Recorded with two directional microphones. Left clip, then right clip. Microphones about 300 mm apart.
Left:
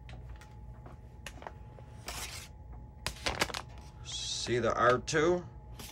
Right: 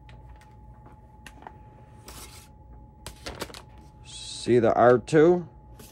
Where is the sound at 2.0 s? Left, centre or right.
Centre.